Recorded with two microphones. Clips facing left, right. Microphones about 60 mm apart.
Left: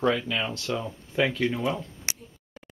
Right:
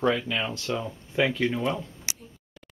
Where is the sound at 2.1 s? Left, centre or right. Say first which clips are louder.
Left 4 dB; left.